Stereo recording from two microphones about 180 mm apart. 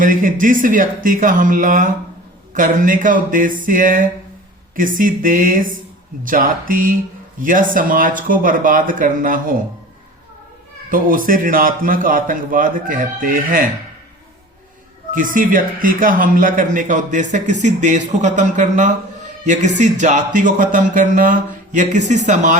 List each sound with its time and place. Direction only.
0.0 s speech: 50° right (ahead or behind)
10.8 s speech: 50° right (ahead or behind)
15.1 s speech: 50° right (ahead or behind)